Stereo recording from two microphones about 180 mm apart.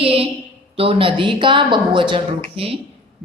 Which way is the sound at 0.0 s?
30° right (ahead or behind).